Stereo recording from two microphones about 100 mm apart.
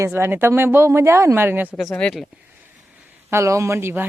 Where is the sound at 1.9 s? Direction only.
5° left (ahead or behind).